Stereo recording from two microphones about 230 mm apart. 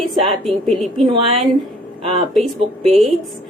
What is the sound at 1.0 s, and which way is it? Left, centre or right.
Speech, right.